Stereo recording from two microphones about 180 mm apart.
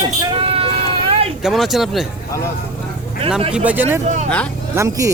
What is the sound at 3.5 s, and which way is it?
Speech, 10° right (ahead or behind).